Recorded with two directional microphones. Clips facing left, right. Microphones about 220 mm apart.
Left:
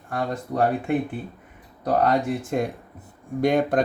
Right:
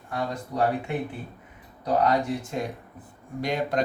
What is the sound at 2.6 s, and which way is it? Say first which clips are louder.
Speech: left 5 dB; 55° left (ahead or behind).